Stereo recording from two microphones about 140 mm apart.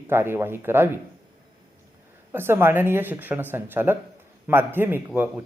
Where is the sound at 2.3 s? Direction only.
15° right (ahead or behind).